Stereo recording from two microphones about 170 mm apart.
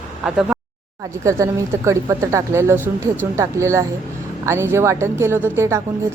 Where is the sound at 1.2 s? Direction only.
20° right (ahead or behind).